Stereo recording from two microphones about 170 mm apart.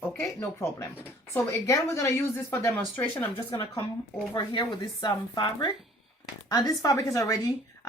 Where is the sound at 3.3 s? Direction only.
30° left (ahead or behind).